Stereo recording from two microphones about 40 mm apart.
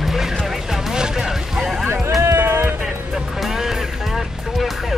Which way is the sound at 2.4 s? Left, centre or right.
Right.